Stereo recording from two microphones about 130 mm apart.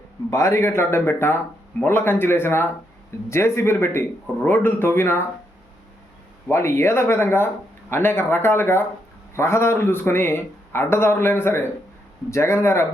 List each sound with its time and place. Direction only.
0.3 s a man's voice: 25° left (ahead or behind)
6.5 s a man's voice: 20° left (ahead or behind)